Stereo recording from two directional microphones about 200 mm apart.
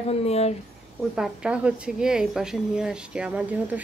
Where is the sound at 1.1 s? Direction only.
5° right (ahead or behind).